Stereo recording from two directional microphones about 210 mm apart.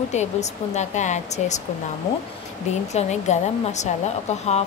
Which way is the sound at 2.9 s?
35° left (ahead or behind).